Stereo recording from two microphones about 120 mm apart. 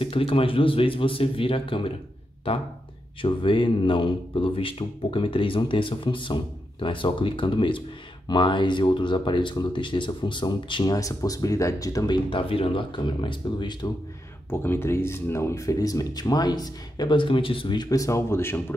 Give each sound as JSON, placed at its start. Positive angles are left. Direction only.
{"t": 0.0, "sound": "speech", "side_deg": 50}
{"t": 12.3, "sound": "speech", "side_deg": 50}
{"t": 14.5, "sound": "speech", "side_deg": 20}